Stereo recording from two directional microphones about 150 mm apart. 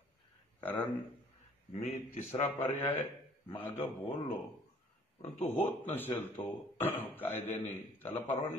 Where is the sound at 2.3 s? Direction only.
45° left (ahead or behind).